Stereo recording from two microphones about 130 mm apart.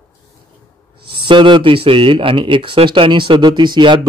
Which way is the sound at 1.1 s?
40° right (ahead or behind).